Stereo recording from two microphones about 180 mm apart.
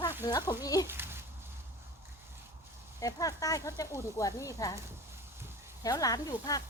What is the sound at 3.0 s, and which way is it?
Speech, 20° left (ahead or behind).